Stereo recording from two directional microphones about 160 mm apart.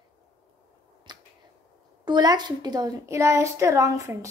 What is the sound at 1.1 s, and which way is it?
Finger snapping, 25° right (ahead or behind).